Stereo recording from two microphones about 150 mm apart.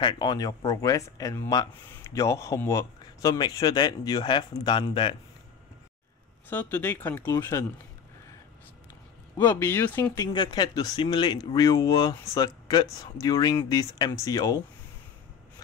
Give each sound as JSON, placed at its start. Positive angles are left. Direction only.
{"t": 0.0, "sound": "speech", "side_deg": 30}
{"t": 6.5, "sound": "speech", "side_deg": 10}
{"t": 9.4, "sound": "speech", "side_deg": 30}
{"t": 9.7, "sound": "speech", "side_deg": 15}
{"t": 10.2, "sound": "speech", "side_deg": 30}